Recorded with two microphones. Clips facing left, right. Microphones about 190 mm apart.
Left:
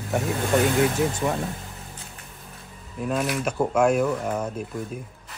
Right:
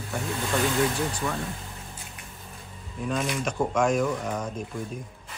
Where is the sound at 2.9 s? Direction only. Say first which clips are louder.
Left 3 dB; 5° left (ahead or behind).